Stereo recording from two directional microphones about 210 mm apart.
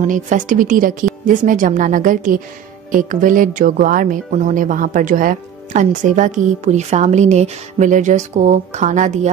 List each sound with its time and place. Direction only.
0.0 s speech: 35° right (ahead or behind)